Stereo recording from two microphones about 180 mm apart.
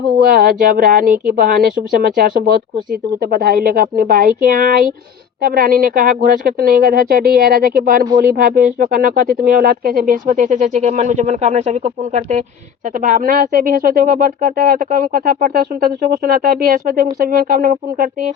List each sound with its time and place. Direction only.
0.2 s speech: 55° right (ahead or behind)